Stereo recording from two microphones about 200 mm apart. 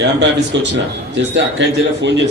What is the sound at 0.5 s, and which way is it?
A man's voice, 65° right (ahead or behind).